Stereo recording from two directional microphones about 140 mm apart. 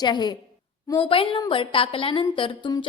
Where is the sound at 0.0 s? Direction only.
30° left (ahead or behind).